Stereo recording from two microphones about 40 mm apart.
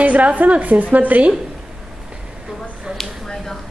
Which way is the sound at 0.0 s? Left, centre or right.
Right.